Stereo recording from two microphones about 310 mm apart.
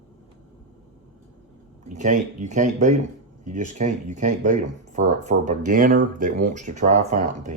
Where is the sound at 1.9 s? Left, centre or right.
Right.